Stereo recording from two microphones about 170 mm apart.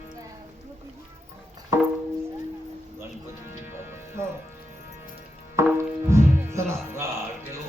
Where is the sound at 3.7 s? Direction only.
15° right (ahead or behind).